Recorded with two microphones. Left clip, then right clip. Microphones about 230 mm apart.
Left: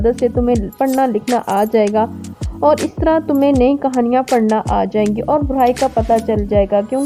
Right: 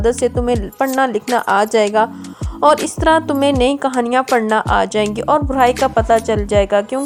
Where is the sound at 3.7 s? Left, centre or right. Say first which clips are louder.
Even; centre.